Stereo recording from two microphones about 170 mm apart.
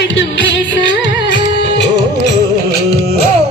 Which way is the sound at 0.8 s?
90° left.